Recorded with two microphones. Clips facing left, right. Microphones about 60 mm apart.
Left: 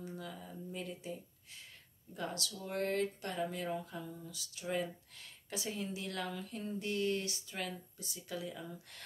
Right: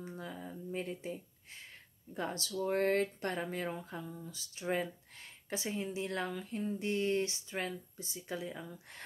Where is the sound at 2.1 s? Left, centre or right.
Right.